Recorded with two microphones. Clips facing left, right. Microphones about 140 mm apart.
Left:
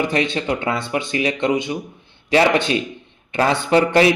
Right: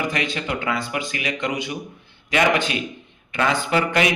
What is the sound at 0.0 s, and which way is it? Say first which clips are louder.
A man's voice: left 5 dB; 25° left (ahead or behind).